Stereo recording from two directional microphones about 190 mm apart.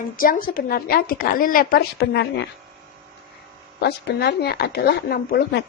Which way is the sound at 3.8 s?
60° left (ahead or behind).